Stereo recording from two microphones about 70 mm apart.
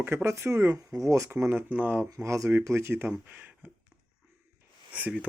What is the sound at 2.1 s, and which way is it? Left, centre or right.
Speech, right.